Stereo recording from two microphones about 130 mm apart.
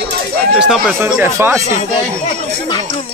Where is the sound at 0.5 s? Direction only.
5° right (ahead or behind).